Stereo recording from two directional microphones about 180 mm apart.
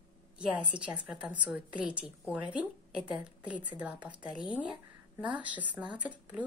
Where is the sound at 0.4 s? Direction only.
5° right (ahead or behind).